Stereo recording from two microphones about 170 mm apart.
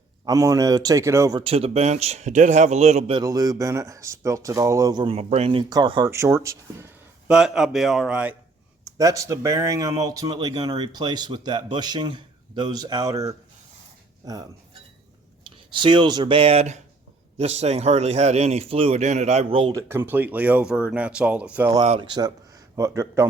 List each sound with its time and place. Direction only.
0.3 s speech: 20° right (ahead or behind)
1.4 s a man's voice: 35° right (ahead or behind)
3.2 s speech: 20° right (ahead or behind)
5.1 s a man's voice: 40° right (ahead or behind); by 6.9 s 15° right (ahead or behind)
7.3 s speech: 5° right (ahead or behind)
9.0 s speech: 20° right (ahead or behind)
15.4 s a man's voice: 30° right (ahead or behind)
19.7 s speech: 15° right (ahead or behind)
21.8 s a man's voice: 35° right (ahead or behind)
22.7 s speech: 15° right (ahead or behind)